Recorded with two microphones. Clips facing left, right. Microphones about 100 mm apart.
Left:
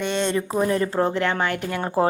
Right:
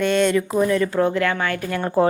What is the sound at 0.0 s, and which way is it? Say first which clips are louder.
A woman's voice: right 5 dB; 25° left (ahead or behind).